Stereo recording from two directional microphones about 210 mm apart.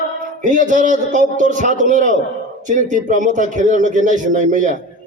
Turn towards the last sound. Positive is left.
turn(degrees=-35)  # may be behind; listen again after turning